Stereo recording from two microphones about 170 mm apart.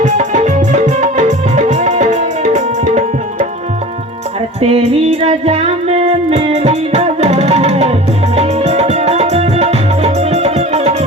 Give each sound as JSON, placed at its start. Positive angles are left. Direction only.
{"t": 0.0, "sound": "music", "side_deg": -45}
{"t": 4.6, "sound": "music", "side_deg": -40}